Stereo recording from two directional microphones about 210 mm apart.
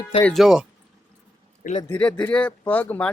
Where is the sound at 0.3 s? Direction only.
Centre (ahead or behind).